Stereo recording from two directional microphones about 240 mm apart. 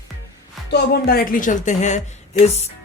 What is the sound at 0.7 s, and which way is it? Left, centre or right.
Speech, left.